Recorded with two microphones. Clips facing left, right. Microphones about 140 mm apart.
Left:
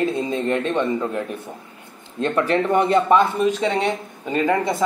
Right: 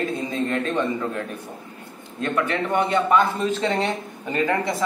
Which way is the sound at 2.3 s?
35° left (ahead or behind).